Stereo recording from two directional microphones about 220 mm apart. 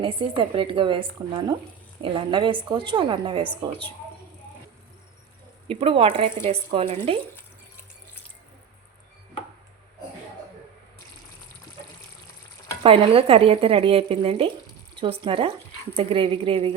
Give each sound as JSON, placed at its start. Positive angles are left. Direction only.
{"t": 0.0, "sound": "a woman's voice", "side_deg": -25}
{"t": 5.6, "sound": "a woman's voice", "side_deg": -25}
{"t": 12.8, "sound": "a woman's voice", "side_deg": -25}